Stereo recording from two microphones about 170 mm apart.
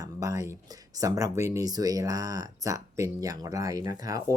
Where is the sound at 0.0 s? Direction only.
20° right (ahead or behind).